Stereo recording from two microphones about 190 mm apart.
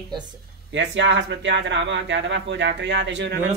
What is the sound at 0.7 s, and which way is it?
Speech, 70° right (ahead or behind).